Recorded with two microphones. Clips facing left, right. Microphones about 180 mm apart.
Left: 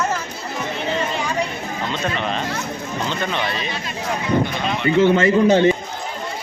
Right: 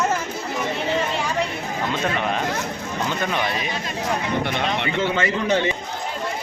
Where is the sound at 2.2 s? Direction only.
10° right (ahead or behind).